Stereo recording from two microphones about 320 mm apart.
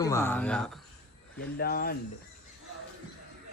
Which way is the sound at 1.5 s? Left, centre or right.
Left.